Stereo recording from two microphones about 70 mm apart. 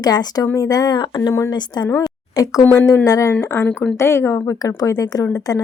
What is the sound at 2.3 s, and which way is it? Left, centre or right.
A woman's voice, left.